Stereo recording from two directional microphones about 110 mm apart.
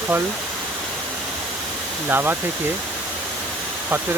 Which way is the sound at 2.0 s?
20° right (ahead or behind).